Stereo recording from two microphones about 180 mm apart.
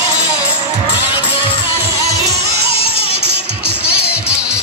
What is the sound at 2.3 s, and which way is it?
Music, 65° right (ahead or behind).